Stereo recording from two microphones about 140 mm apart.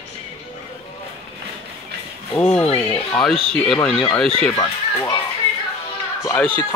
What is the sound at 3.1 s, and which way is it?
Speech, 5° left (ahead or behind).